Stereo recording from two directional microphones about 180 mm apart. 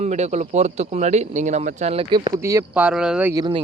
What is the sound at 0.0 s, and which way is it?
A man's voice, 40° right (ahead or behind).